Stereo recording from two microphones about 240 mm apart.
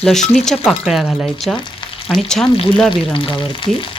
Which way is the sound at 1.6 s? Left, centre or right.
Centre.